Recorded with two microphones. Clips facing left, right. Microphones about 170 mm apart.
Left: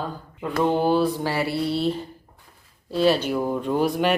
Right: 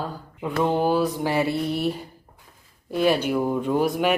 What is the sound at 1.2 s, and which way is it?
Speech, 20° right (ahead or behind).